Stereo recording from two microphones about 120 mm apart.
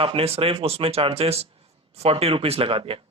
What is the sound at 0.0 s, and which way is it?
Speech, 50° right (ahead or behind).